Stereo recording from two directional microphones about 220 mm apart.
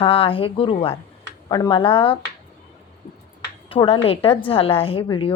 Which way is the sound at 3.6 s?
25° left (ahead or behind).